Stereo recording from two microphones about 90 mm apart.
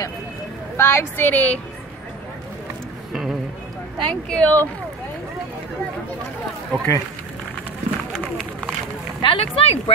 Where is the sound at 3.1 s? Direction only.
5° right (ahead or behind).